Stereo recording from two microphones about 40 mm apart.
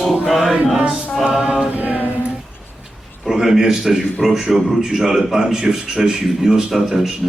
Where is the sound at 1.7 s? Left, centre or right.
Right.